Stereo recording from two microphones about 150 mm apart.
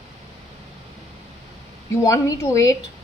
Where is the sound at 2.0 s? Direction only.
20° left (ahead or behind).